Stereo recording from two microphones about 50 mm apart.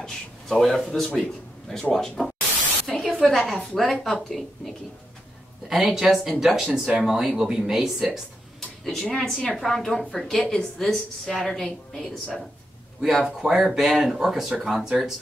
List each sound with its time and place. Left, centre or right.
0.0 s a sound: centre
2.0 s a woman's voice: centre
8.5 s a sound: centre
9.0 s a woman's voice: centre
9.6 s a woman's voice: centre
13.2 s speech: centre